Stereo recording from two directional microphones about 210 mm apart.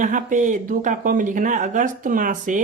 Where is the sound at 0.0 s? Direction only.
40° right (ahead or behind).